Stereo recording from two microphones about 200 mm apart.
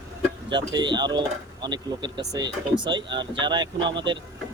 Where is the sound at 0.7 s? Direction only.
20° right (ahead or behind).